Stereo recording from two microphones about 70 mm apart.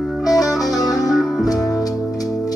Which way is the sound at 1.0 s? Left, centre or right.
Centre.